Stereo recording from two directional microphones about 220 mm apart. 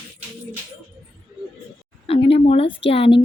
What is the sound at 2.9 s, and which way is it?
Speech, 25° left (ahead or behind).